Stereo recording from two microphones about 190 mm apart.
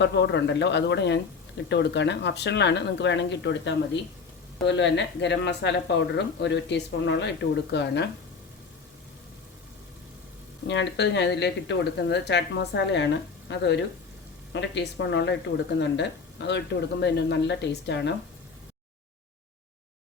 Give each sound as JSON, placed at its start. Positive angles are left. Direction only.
{"t": 0.0, "sound": "a woman's voice", "side_deg": 65}
{"t": 10.7, "sound": "speech", "side_deg": 65}